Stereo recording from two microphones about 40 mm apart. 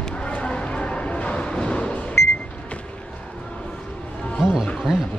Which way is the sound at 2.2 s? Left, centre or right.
Left.